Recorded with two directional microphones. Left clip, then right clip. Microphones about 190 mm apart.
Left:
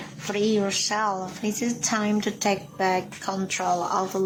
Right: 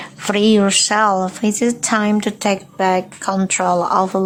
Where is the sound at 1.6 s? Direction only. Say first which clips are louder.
Right 9 dB; 40° right (ahead or behind).